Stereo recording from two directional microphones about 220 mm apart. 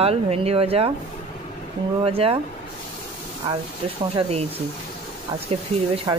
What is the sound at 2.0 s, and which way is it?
Speech, 25° right (ahead or behind).